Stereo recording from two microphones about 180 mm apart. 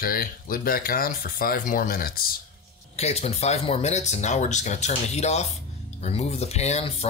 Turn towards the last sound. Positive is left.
turn(degrees=35)  # may be behind; listen again after turning